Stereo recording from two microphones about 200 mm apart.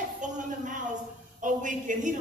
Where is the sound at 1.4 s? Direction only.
40° right (ahead or behind).